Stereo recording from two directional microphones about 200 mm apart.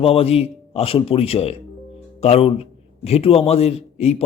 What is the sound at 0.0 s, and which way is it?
A man's voice, 30° left (ahead or behind).